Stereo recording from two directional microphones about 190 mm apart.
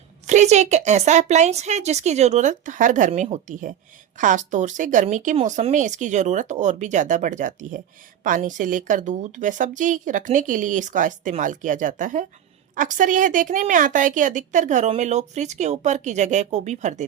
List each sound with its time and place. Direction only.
0.3 s a woman's voice: 35° right (ahead or behind)